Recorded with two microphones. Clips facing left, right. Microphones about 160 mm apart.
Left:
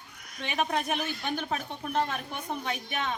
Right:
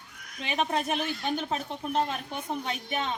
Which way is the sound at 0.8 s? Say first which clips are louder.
Right 1 dB; 30° right (ahead or behind).